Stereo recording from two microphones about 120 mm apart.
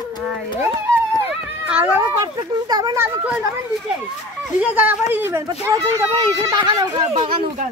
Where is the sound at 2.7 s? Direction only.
35° right (ahead or behind).